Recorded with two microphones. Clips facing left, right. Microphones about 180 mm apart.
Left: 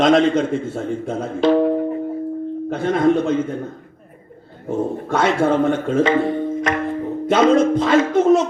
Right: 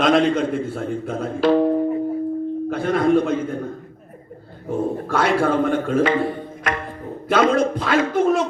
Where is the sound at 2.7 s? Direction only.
25° left (ahead or behind).